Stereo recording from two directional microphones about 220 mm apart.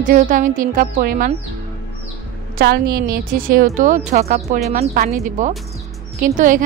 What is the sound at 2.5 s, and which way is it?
A woman's voice, 45° right (ahead or behind).